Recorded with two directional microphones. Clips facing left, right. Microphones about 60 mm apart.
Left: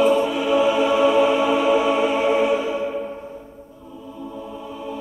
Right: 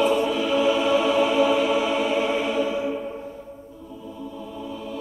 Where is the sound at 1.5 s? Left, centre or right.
Left.